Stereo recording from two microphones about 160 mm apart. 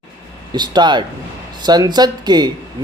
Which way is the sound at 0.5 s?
25° right (ahead or behind).